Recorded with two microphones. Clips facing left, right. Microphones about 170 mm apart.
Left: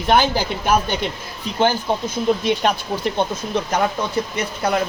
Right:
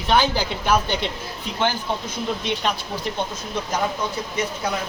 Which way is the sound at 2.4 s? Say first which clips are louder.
Left 6 dB; 50° left (ahead or behind).